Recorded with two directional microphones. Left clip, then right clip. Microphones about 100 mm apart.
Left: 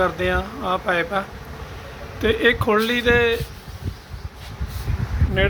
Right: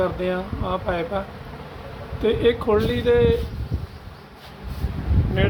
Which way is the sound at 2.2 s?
10° left (ahead or behind).